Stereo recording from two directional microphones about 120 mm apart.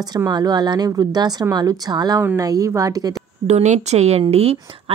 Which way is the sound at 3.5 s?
70° right (ahead or behind).